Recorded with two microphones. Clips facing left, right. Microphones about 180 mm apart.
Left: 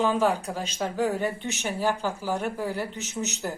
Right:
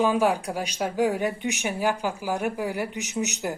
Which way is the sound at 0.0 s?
10° right (ahead or behind).